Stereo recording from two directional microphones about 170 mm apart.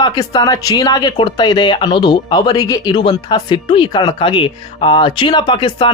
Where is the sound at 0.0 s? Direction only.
25° left (ahead or behind).